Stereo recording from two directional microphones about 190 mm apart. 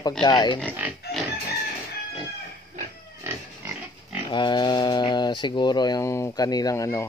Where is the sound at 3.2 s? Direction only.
10° right (ahead or behind).